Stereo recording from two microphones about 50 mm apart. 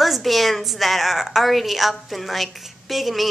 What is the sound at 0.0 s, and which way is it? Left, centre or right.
A woman's voice, centre.